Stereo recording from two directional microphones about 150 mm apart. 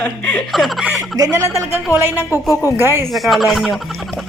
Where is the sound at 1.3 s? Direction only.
20° right (ahead or behind).